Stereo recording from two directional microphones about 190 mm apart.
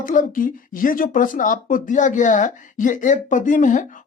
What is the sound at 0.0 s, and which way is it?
Speech, 45° left (ahead or behind).